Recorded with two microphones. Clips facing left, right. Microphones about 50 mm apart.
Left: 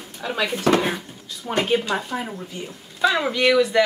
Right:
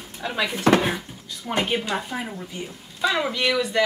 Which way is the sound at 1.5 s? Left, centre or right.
Centre.